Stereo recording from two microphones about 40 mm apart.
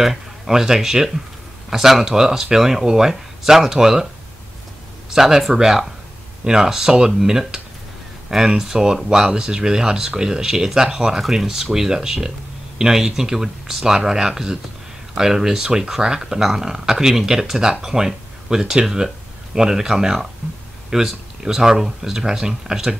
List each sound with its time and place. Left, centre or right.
0.0 s speech: centre
5.1 s speech: centre